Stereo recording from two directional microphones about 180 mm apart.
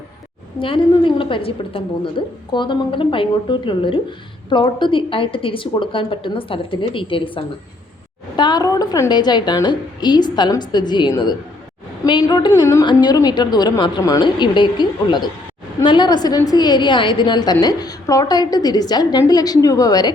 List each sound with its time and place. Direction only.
0.6 s a woman's voice: 30° left (ahead or behind)